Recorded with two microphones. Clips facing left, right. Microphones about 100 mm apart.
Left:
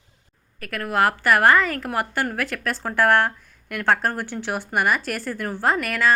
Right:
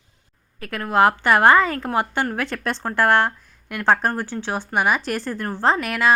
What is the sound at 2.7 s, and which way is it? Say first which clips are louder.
Speech: right 2 dB; 5° left (ahead or behind).